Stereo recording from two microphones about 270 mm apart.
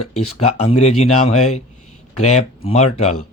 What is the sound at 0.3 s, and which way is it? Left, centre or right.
Speech, left.